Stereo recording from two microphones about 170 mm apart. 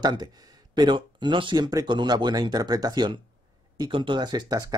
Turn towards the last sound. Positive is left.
turn(degrees=-20)  # may be behind; listen again after turning